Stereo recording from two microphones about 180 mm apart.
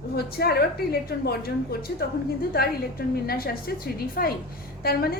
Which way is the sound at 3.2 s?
55° left (ahead or behind).